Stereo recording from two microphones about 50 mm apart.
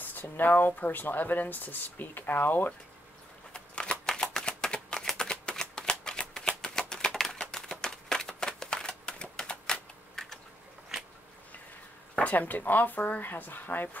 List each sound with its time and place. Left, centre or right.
0.0 s speech: left
3.5 s shuffling cards: left
4.1 s a sound: centre
7.8 s typewriter: centre
12.2 s speech: left